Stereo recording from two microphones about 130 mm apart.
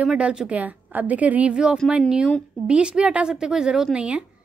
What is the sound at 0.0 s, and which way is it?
A woman's voice, 5° right (ahead or behind).